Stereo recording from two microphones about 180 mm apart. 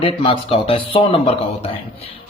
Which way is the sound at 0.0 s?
30° left (ahead or behind).